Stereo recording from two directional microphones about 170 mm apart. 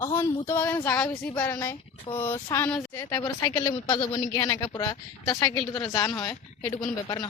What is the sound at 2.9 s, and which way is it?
A woman's voice, 20° left (ahead or behind).